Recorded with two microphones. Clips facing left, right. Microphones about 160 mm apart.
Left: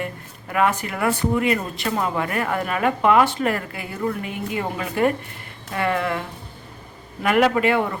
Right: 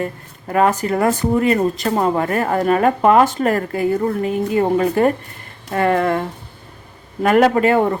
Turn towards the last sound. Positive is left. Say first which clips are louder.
# right 5 dB
turn(degrees=-40)  # may be behind; listen again after turning